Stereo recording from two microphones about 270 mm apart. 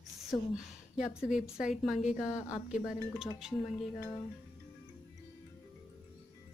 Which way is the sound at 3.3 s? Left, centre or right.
Centre.